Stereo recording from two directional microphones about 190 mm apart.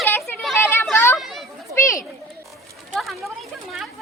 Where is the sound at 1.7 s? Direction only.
15° left (ahead or behind).